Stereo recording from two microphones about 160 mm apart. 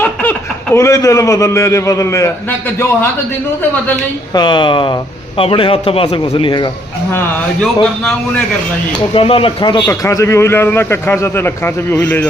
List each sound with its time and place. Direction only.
0.0 s a man's voice: 10° left (ahead or behind)
4.4 s a man's voice: 30° left (ahead or behind)
9.1 s a man's voice: 35° left (ahead or behind)
9.8 s a man's voice: 20° left (ahead or behind)